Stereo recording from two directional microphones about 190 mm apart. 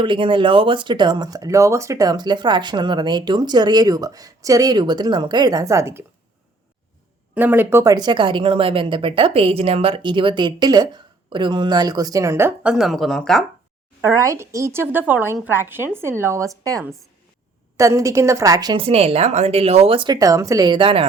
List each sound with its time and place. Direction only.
0.0 s speech: 25° right (ahead or behind)
7.3 s speech: 10° right (ahead or behind)
14.2 s a woman's voice: 15° right (ahead or behind)